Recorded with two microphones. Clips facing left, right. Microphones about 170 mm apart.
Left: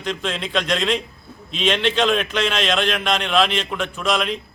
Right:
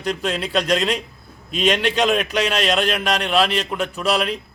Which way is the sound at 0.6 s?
5° right (ahead or behind).